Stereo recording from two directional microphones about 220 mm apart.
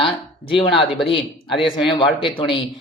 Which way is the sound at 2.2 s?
20° left (ahead or behind).